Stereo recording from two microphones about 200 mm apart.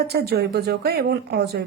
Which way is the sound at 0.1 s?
55° right (ahead or behind).